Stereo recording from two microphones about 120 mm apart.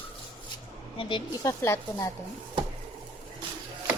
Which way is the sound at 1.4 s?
25° left (ahead or behind).